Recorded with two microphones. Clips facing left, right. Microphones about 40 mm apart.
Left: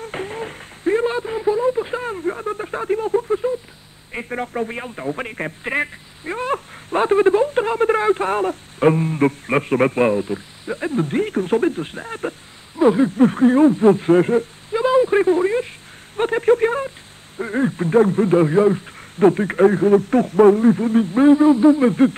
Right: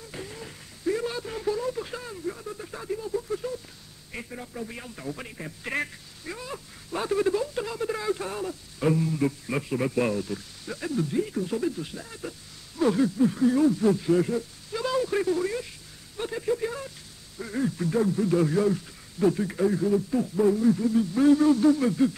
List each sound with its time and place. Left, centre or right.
0.0 s a sound: left
4.3 s speech: left
5.6 s speech: left
6.3 s speech: left
10.0 s speech: left
12.7 s speech: left
13.1 s speech: left
14.8 s speech: left
16.2 s speech: left